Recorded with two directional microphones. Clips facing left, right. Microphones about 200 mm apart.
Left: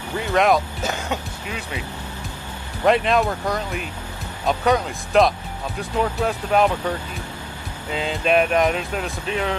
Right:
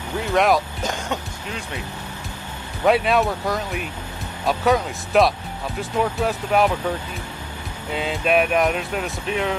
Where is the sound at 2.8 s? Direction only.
5° right (ahead or behind).